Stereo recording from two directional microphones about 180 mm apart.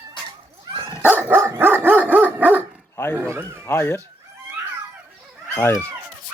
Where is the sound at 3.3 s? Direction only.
15° right (ahead or behind).